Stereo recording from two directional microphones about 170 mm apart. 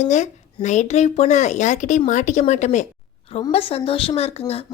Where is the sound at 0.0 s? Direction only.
45° left (ahead or behind).